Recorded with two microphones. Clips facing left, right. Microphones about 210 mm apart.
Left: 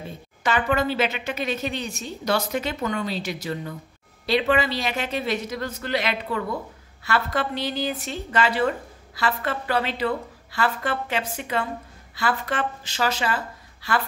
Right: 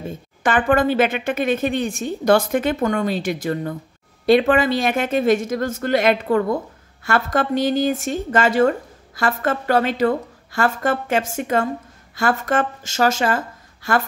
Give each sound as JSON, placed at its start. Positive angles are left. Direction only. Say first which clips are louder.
{"t": 0.4, "sound": "speech", "louder": "right 6 dB", "side_deg": -50}